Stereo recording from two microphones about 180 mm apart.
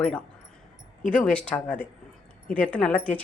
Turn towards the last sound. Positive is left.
turn(degrees=5)  # may be behind; listen again after turning